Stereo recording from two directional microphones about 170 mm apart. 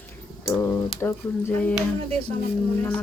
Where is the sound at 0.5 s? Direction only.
10° left (ahead or behind).